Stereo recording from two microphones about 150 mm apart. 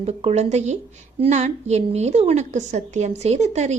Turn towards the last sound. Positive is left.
turn(degrees=-50)  # may be behind; listen again after turning